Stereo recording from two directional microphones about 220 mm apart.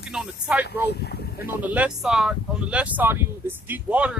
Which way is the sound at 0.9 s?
50° left (ahead or behind).